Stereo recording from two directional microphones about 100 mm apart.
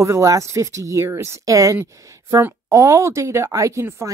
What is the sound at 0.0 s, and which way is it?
Speech, 35° right (ahead or behind).